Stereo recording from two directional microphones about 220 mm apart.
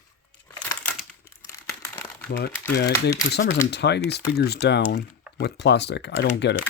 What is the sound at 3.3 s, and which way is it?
Speech, 35° left (ahead or behind).